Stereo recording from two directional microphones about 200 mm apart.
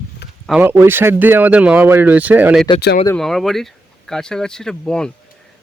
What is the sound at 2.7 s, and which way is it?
Speech, 50° left (ahead or behind).